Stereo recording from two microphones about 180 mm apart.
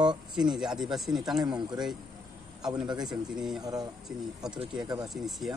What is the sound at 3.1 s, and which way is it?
Speech, 5° right (ahead or behind).